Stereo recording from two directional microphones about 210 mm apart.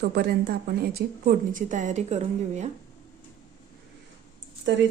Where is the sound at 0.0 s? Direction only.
50° right (ahead or behind); by 2.6 s 35° right (ahead or behind).